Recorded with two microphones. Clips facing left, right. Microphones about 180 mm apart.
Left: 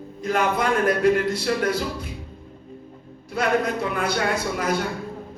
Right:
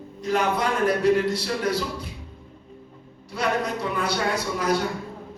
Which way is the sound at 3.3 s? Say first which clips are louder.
Left 3 dB; 50° left (ahead or behind).